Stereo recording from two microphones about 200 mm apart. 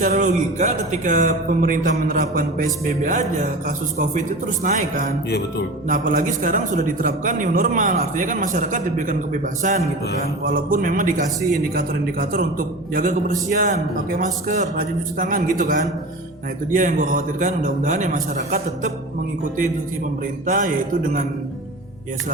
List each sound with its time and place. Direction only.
0.0 s a man's voice: 40° right (ahead or behind)
4.6 s a man's voice: 40° right (ahead or behind)
12.3 s a man's voice: 45° right (ahead or behind)
20.5 s a man's voice: 40° right (ahead or behind)